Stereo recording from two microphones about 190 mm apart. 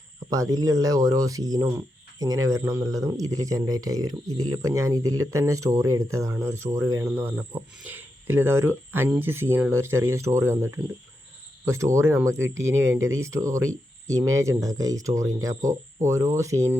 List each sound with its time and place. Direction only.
0.3 s speech: 15° right (ahead or behind)